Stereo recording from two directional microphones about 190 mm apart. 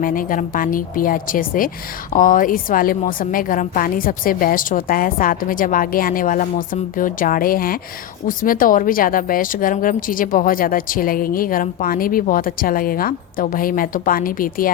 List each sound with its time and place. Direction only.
0.0 s speech: 45° left (ahead or behind)